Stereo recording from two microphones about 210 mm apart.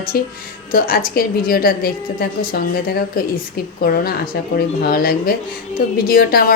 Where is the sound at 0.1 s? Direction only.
45° left (ahead or behind).